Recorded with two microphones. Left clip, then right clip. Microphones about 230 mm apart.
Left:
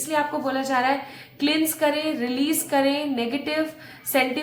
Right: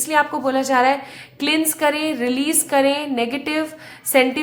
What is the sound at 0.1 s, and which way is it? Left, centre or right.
A woman's voice, right.